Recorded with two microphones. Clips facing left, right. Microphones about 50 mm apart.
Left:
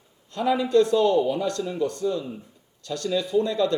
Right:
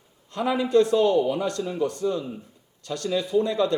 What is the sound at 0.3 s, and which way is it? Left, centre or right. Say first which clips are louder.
A man's voice: even; right.